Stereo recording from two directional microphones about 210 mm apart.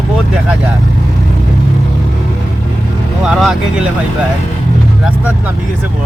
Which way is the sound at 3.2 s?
Centre (ahead or behind).